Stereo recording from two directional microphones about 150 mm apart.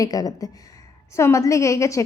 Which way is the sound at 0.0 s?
25° left (ahead or behind).